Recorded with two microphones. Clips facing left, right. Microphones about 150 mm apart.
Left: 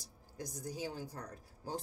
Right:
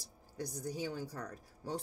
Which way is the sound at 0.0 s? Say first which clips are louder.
Right 3 dB; 65° right (ahead or behind).